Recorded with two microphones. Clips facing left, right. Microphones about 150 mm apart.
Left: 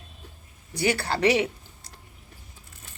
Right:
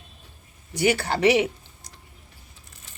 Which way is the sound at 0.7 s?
15° right (ahead or behind).